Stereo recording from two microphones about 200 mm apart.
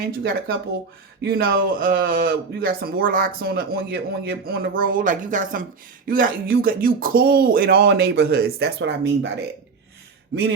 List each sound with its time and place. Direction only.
0.0 s speech: 50° right (ahead or behind)